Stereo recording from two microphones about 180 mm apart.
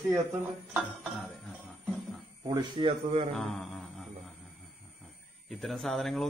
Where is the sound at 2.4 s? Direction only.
25° right (ahead or behind).